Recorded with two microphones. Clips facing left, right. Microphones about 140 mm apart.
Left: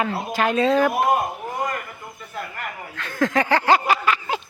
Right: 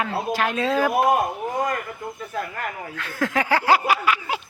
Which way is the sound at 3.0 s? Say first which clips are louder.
Left 3 dB; 5° right (ahead or behind).